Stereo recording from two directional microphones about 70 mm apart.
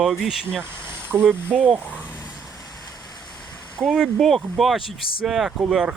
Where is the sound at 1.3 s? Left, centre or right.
Right.